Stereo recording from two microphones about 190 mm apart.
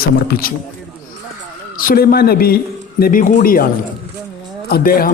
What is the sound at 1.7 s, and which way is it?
A man's voice, 50° left (ahead or behind).